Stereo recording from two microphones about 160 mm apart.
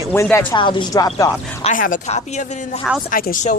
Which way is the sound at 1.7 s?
55° left (ahead or behind).